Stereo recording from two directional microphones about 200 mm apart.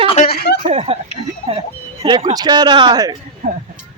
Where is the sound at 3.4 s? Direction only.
35° right (ahead or behind).